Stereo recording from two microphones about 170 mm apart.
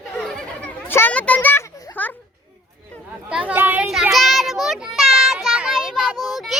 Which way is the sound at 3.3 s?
10° right (ahead or behind).